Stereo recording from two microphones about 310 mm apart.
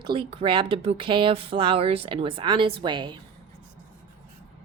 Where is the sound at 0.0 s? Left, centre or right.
Centre.